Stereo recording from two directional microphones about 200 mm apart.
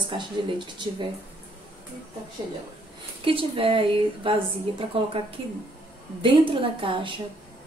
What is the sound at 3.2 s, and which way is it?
Speech, 25° right (ahead or behind).